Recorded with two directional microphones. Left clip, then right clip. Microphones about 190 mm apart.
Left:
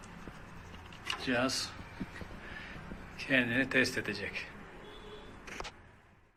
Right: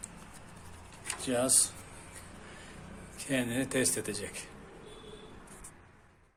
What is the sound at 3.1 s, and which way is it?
Speech, 30° right (ahead or behind).